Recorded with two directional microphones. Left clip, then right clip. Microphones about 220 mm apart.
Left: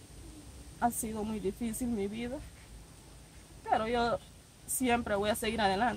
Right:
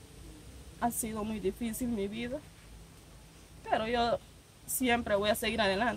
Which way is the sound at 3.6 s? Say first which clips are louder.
Even; 15° right (ahead or behind).